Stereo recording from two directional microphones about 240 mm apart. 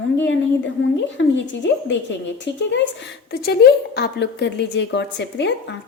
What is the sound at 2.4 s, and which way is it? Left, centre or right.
A woman's voice, left.